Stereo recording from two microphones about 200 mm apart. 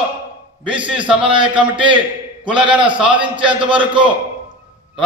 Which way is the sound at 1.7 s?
25° right (ahead or behind).